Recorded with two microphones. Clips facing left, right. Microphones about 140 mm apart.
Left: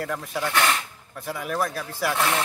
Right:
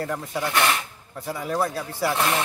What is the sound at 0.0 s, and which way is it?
Speech, 20° right (ahead or behind).